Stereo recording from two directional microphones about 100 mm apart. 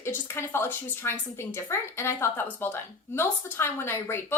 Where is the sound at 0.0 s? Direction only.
25° left (ahead or behind).